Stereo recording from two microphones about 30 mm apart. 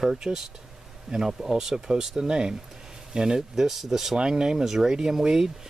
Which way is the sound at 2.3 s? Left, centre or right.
Right.